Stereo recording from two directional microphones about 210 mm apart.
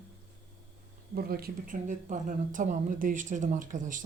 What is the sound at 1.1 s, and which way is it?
Speech, 45° right (ahead or behind).